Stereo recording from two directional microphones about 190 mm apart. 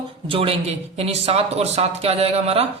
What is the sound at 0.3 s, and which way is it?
Speech, 30° right (ahead or behind).